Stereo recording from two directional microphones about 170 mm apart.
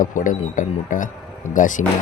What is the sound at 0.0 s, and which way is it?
Speech, 50° left (ahead or behind).